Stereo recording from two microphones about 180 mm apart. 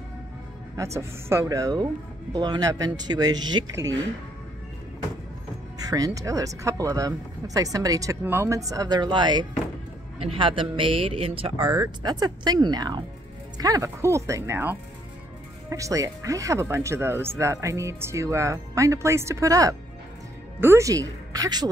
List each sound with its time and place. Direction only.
0.7 s speech: 15° right (ahead or behind)
5.8 s speech: 20° right (ahead or behind)